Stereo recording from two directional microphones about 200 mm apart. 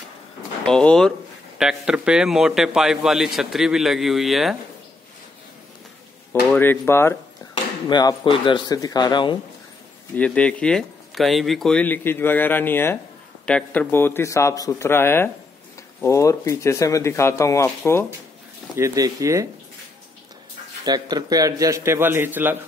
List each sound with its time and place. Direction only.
0.7 s a man's voice: 5° left (ahead or behind)
6.5 s speech: 10° left (ahead or behind)
10.1 s speech: 5° left (ahead or behind)
18.8 s a man's voice: 15° right (ahead or behind)
20.8 s a man's voice: 20° right (ahead or behind)